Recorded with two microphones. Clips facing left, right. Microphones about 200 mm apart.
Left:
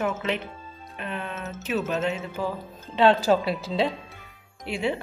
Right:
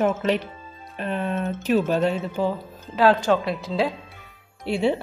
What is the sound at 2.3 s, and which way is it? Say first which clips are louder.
Speech: right 5 dB; 20° right (ahead or behind).